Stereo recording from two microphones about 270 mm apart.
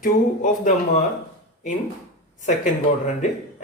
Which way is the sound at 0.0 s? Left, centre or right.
Left.